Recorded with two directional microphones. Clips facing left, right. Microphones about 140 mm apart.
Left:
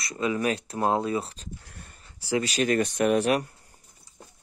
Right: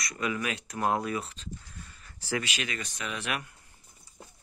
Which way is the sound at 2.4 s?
40° left (ahead or behind).